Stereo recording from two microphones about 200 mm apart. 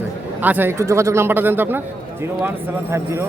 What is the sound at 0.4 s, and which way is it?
A man's voice, 10° right (ahead or behind).